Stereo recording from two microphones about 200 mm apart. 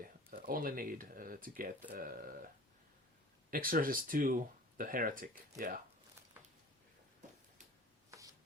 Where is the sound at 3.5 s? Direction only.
45° right (ahead or behind).